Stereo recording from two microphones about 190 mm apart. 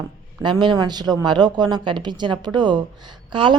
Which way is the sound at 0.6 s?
25° right (ahead or behind).